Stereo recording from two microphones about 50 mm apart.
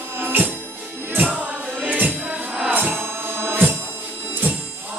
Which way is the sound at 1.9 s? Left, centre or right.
Right.